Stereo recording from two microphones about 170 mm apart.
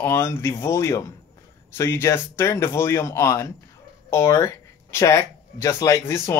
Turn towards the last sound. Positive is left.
turn(degrees=15)  # may be behind; listen again after turning